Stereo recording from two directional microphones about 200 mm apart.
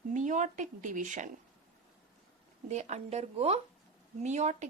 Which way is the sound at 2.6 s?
35° right (ahead or behind).